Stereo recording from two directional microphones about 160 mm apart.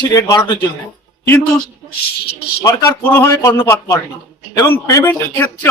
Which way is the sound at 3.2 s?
20° left (ahead or behind).